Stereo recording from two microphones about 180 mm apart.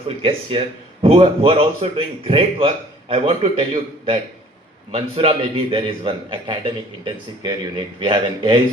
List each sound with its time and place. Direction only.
0.2 s a man's voice: 30° right (ahead or behind)